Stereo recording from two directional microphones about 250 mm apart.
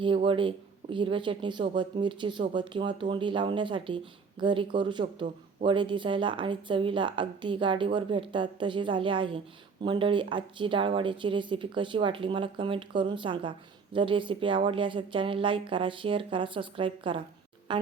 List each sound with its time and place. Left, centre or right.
0.2 s speech: right